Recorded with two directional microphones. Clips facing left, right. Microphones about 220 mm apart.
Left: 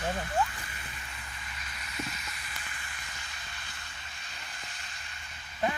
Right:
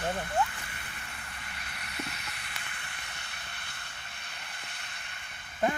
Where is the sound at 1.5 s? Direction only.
60° right (ahead or behind).